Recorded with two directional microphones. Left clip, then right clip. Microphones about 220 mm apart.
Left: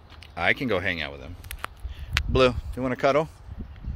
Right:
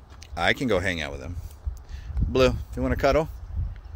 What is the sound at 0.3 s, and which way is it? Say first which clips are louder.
Speech: right 1 dB; 20° right (ahead or behind).